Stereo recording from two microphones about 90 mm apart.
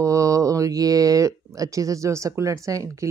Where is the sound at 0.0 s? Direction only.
35° right (ahead or behind).